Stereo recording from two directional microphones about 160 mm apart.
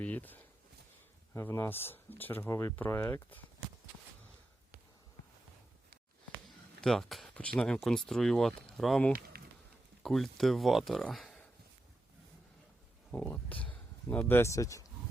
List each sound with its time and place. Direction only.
0.0 s speech: 10° left (ahead or behind)
6.8 s speech: centre (ahead or behind)
9.3 s a sound: 70° right (ahead or behind)
10.0 s speech: centre (ahead or behind)
13.1 s speech: 10° left (ahead or behind)